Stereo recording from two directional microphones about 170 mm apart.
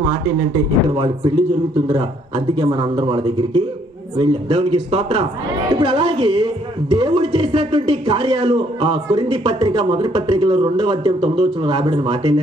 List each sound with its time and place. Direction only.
0.9 s a man's voice: 20° right (ahead or behind)